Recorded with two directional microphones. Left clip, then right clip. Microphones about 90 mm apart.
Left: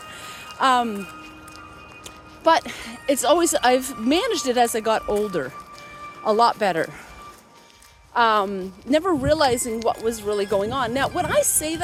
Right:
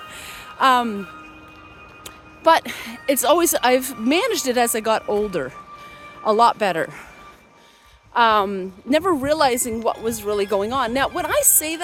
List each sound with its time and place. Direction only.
0.1 s music: 40° right (ahead or behind)
2.4 s speech: 50° right (ahead or behind)
5.0 s speech: 5° left (ahead or behind)
6.2 s speech: 50° right (ahead or behind)
8.1 s speech: 50° right (ahead or behind)
8.4 s speech: 60° right (ahead or behind); by 9.7 s 45° right (ahead or behind)
9.8 s speech: 30° right (ahead or behind)
10.1 s speech: 45° right (ahead or behind)
10.6 s speech: 55° right (ahead or behind)